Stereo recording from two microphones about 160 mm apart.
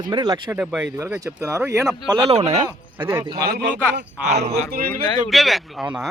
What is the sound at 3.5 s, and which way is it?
Speech, 85° right.